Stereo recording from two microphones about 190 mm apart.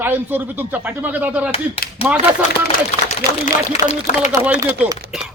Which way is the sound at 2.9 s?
30° left (ahead or behind).